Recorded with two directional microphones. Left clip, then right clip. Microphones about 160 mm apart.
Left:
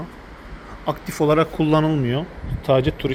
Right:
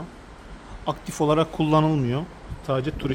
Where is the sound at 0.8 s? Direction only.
15° right (ahead or behind).